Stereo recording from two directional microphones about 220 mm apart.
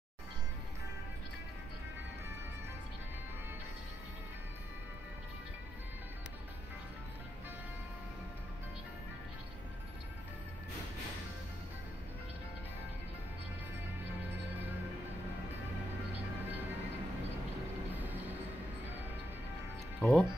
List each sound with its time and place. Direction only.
20.0 s speech: 5° left (ahead or behind)